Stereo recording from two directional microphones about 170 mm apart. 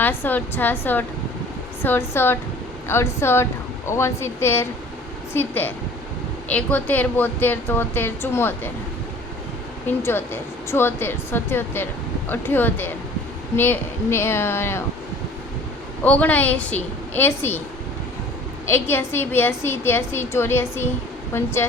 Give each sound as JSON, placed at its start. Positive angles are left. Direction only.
{"t": 0.0, "sound": "a woman's voice", "side_deg": 10}
{"t": 9.8, "sound": "a woman's voice", "side_deg": 15}
{"t": 16.0, "sound": "a woman's voice", "side_deg": 10}
{"t": 18.6, "sound": "a woman's voice", "side_deg": 15}